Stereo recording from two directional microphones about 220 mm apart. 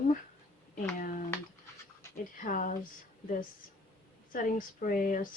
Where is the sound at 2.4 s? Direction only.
35° left (ahead or behind).